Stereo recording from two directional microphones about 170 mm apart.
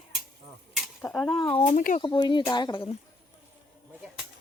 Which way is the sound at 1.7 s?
50° left (ahead or behind).